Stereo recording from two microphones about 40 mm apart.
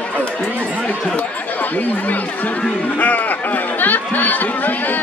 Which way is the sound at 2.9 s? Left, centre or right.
Left.